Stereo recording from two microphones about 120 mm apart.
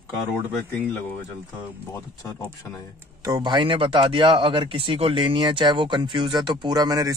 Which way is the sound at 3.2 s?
35° right (ahead or behind).